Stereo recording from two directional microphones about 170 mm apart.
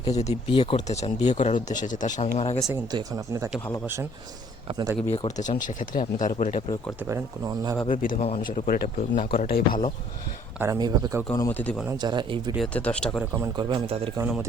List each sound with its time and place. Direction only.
0.2 s speech: 35° left (ahead or behind)
2.6 s speech: 20° right (ahead or behind)
4.7 s speech: 25° right (ahead or behind)
5.0 s speech: 35° left (ahead or behind)
7.1 s speech: 20° right (ahead or behind)
7.9 s speech: 50° left (ahead or behind)
10.6 s speech: 20° right (ahead or behind)
11.3 s speech: 10° left (ahead or behind)
11.9 s speech: 25° right (ahead or behind)
12.5 s speech: 5° left (ahead or behind)
13.6 s speech: 25° right (ahead or behind)